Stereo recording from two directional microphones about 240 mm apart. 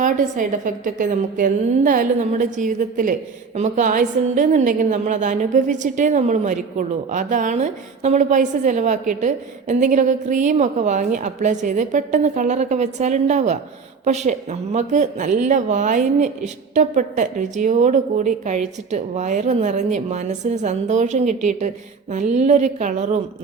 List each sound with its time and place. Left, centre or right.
0.0 s a woman's voice: right